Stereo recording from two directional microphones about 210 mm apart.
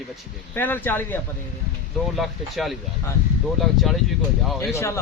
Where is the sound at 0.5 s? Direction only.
10° left (ahead or behind).